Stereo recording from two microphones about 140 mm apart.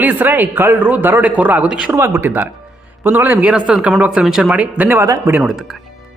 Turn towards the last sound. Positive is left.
turn(degrees=-15)  # may be behind; listen again after turning